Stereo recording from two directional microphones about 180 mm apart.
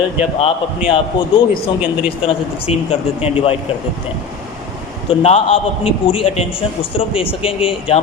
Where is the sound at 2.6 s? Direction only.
30° left (ahead or behind).